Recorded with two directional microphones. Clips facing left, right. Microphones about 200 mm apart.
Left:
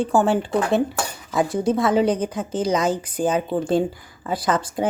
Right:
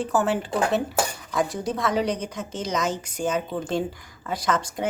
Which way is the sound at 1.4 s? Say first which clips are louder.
Left 7 dB; centre (ahead or behind).